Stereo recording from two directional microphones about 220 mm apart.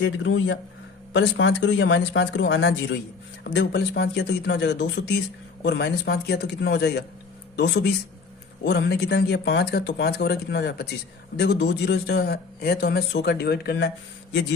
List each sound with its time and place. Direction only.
0.0 s a man's voice: 60° left (ahead or behind); by 13.9 s 45° left (ahead or behind)